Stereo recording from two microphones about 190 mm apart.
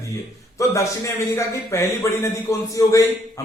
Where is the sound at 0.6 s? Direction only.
15° left (ahead or behind).